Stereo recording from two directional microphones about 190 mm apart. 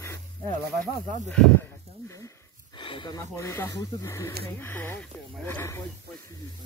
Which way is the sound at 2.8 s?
25° left (ahead or behind).